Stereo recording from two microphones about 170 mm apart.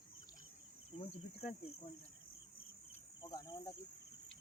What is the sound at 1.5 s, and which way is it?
Cricket, 35° left (ahead or behind).